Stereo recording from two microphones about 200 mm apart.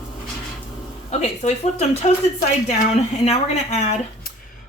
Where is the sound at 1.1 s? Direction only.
35° left (ahead or behind).